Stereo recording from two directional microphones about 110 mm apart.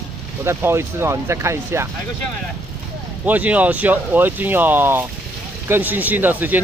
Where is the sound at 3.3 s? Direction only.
15° right (ahead or behind).